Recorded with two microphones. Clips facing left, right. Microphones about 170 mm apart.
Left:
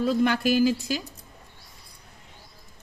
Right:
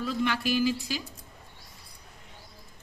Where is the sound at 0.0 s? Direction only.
45° left (ahead or behind).